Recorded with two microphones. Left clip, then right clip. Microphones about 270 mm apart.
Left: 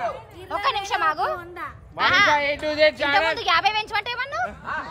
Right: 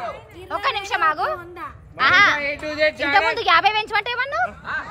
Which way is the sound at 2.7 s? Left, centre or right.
Left.